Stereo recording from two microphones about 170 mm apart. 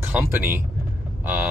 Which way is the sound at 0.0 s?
10° right (ahead or behind).